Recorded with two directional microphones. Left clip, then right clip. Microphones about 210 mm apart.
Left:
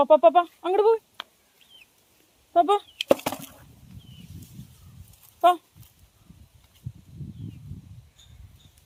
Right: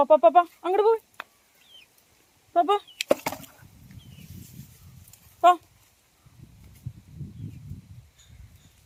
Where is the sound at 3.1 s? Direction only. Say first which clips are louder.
Left 3 dB; 25° left (ahead or behind).